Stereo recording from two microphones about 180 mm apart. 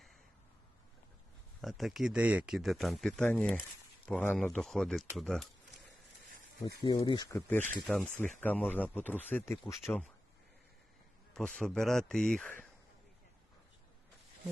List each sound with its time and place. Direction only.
1.6 s speech: centre (ahead or behind)
5.1 s a sound: centre (ahead or behind)
6.8 s speech: 25° left (ahead or behind)
9.8 s speech: centre (ahead or behind)
11.3 s speech: 5° left (ahead or behind)